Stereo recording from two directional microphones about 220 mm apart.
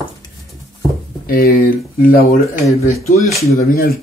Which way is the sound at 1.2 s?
45° left (ahead or behind).